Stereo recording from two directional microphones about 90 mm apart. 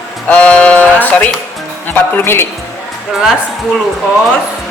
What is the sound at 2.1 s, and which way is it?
Speech, 25° left (ahead or behind).